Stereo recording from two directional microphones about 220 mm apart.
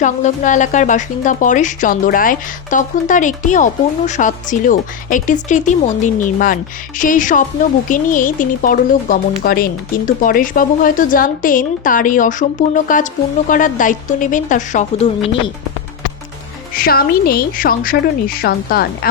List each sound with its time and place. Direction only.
0.0 s a woman's voice: 35° left (ahead or behind)
16.7 s a woman's voice: 40° left (ahead or behind)